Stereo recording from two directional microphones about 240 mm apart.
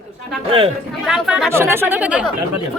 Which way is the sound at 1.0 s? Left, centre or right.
Centre.